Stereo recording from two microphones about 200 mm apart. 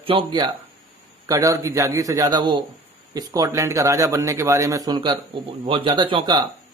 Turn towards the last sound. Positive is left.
turn(degrees=-25)  # may be behind; listen again after turning